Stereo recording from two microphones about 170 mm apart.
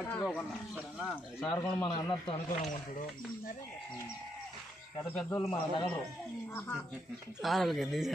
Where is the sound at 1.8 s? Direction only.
30° left (ahead or behind).